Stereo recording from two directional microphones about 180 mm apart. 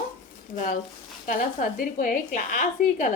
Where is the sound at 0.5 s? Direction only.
45° left (ahead or behind).